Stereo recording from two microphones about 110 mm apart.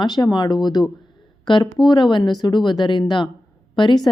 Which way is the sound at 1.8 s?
45° left (ahead or behind).